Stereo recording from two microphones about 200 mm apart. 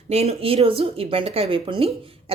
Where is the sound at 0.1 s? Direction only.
30° right (ahead or behind).